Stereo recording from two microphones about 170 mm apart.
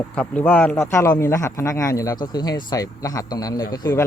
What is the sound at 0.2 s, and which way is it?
Speech, 5° left (ahead or behind).